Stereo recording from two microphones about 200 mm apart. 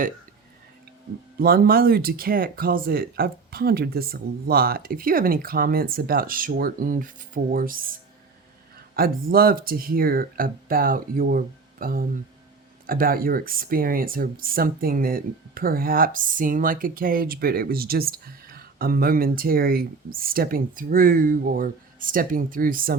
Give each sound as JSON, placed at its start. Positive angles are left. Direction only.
{"t": 1.4, "sound": "speech", "side_deg": -50}
{"t": 9.0, "sound": "speech", "side_deg": -45}